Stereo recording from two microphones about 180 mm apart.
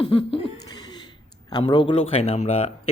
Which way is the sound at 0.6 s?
20° left (ahead or behind).